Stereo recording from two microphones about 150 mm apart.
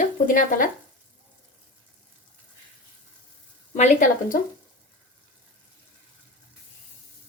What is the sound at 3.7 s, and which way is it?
Speech, 55° left (ahead or behind).